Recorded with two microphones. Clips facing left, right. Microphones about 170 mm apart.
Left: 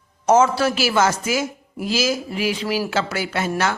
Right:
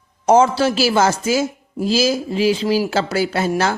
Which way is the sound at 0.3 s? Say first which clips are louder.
Right 2 dB; 30° right (ahead or behind).